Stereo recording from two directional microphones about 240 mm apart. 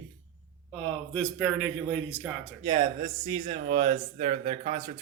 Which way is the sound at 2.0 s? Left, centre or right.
Centre.